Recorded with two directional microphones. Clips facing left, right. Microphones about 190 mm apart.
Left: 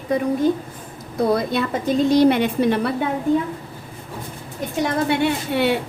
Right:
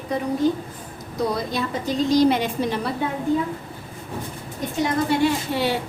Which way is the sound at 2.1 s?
60° left (ahead or behind).